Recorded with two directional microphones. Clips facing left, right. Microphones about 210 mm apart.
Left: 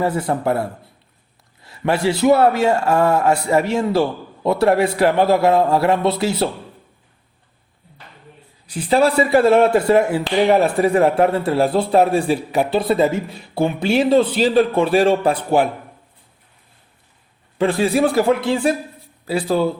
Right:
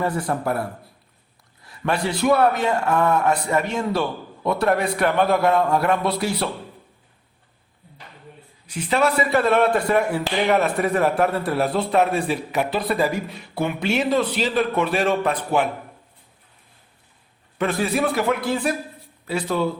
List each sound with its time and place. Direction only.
0.0 s speech: 25° left (ahead or behind)
8.6 s speech: 35° left (ahead or behind)
17.6 s speech: 30° left (ahead or behind)